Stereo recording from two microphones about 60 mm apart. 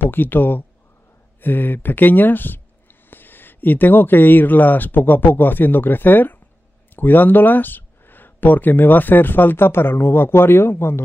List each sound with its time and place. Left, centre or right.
0.0 s speech: left